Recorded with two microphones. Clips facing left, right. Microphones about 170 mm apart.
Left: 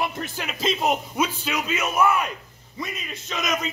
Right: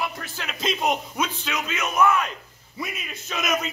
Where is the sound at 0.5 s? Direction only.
Centre (ahead or behind).